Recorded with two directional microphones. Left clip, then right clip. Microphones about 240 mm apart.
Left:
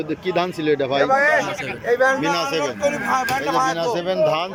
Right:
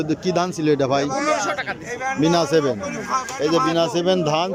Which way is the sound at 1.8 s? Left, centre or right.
Left.